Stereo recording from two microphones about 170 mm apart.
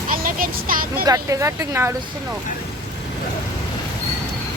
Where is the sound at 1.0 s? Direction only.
20° right (ahead or behind).